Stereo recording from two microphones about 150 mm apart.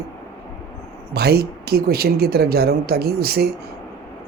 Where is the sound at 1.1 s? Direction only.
90° right.